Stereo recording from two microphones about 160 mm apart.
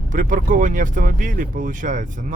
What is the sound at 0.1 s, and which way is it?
Speech, 55° right (ahead or behind).